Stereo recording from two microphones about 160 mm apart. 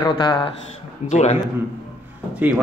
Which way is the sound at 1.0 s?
45° left (ahead or behind).